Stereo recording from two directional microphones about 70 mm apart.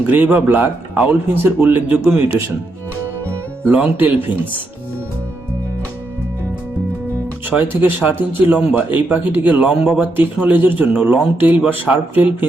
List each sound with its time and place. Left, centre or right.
0.0 s speech: right
3.7 s speech: right
7.4 s speech: right
9.6 s speech: centre
10.0 s speech: right